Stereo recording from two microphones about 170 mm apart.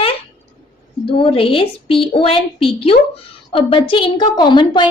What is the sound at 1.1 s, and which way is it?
A woman's voice, 30° left (ahead or behind).